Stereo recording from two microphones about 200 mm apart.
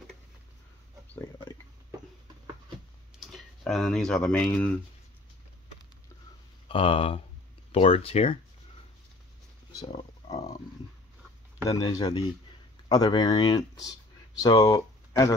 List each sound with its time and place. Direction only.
3.2 s speech: centre (ahead or behind)
6.7 s speech: 30° left (ahead or behind)
9.7 s a sound: 20° left (ahead or behind)
11.6 s speech: 15° left (ahead or behind)